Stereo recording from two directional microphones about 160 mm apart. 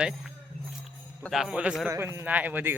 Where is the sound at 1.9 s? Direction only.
15° right (ahead or behind).